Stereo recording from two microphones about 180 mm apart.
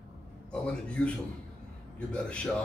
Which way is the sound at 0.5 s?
5° left (ahead or behind).